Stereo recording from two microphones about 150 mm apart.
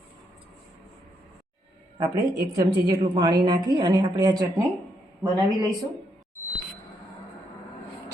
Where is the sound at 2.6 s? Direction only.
25° right (ahead or behind).